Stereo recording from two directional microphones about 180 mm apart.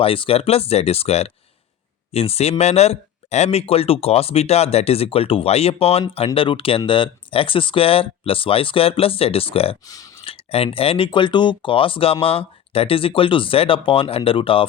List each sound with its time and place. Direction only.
0.0 s speech: 30° left (ahead or behind)
9.8 s speech: 20° left (ahead or behind)
10.3 s speech: 30° left (ahead or behind)